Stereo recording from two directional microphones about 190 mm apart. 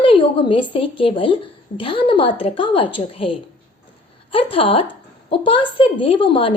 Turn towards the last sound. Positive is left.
turn(degrees=25)  # may be behind; listen again after turning